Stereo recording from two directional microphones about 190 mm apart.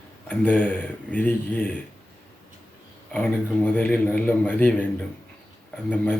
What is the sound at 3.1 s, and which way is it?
A man's voice, 5° left (ahead or behind).